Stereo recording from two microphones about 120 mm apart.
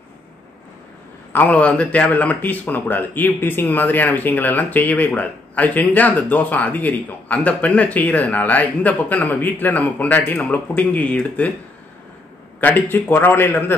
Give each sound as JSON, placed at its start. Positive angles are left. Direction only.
{"t": 1.3, "sound": "a man's voice", "side_deg": 15}
{"t": 12.5, "sound": "a man's voice", "side_deg": 15}